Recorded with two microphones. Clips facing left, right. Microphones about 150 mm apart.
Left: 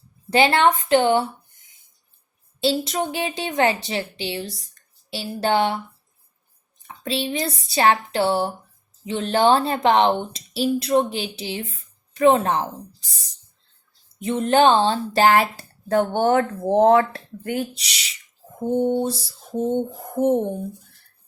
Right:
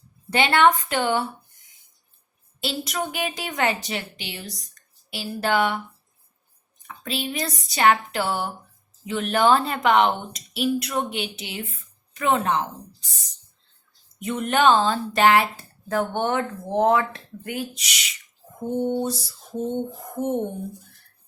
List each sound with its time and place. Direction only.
0.3 s a woman's voice: 30° left (ahead or behind)
2.6 s a woman's voice: 30° left (ahead or behind)
6.8 s a woman's voice: 30° left (ahead or behind)
14.2 s a woman's voice: 30° left (ahead or behind)